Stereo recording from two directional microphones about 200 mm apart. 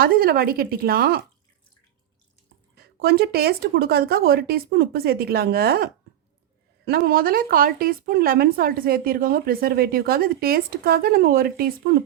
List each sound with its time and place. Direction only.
0.0 s speech: 50° right (ahead or behind)
2.7 s speech: 50° right (ahead or behind)